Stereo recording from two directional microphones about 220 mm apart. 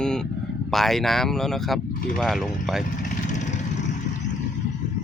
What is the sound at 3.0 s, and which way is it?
Vehicle, 35° left (ahead or behind).